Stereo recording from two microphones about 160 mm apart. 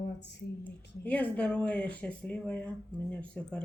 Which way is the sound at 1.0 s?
10° left (ahead or behind).